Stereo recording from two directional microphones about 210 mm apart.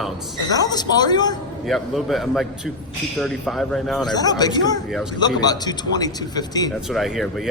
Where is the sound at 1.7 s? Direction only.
Centre (ahead or behind).